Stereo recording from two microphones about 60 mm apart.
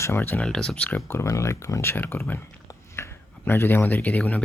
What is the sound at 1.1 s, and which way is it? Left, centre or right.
Speech, left.